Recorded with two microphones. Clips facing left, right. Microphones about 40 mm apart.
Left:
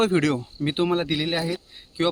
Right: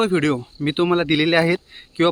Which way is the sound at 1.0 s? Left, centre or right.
Right.